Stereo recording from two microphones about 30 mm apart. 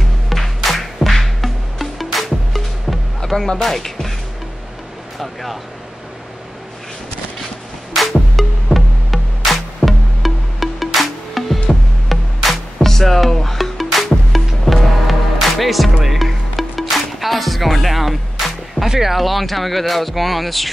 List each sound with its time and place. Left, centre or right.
0.3 s music: centre
3.2 s music: left
3.6 s speech: centre
5.2 s speech: centre
7.9 s music: centre
18.9 s speech: centre